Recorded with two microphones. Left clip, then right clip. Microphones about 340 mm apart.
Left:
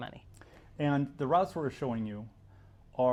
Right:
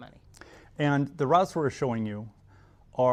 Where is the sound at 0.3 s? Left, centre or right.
Right.